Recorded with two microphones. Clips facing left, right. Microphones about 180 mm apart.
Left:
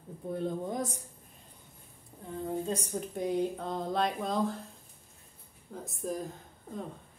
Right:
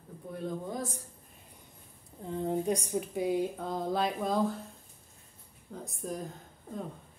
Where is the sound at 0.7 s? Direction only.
20° left (ahead or behind).